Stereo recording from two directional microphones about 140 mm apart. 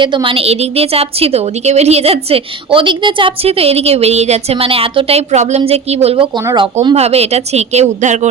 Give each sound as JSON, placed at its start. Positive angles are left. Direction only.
{"t": 0.0, "sound": "a woman's voice", "side_deg": -35}